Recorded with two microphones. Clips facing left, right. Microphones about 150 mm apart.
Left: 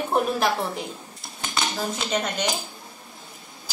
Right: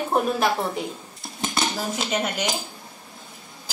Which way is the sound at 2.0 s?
10° right (ahead or behind).